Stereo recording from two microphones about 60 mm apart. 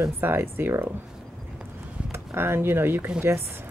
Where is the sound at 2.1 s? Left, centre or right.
Right.